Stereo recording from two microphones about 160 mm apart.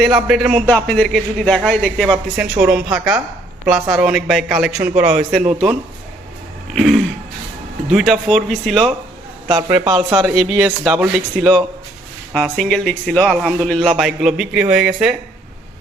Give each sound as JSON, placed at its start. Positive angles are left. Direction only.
{"t": 0.0, "sound": "speech", "side_deg": 0}
{"t": 6.7, "sound": "speech", "side_deg": 0}
{"t": 9.5, "sound": "a man's voice", "side_deg": -25}
{"t": 9.9, "sound": "speech", "side_deg": 0}